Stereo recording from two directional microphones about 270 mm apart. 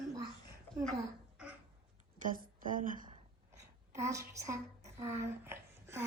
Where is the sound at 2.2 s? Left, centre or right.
Right.